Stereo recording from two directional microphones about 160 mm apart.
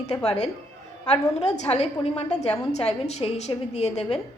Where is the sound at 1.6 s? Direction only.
40° left (ahead or behind).